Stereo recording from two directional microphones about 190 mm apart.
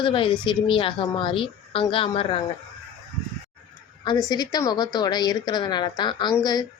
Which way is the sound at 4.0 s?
20° left (ahead or behind).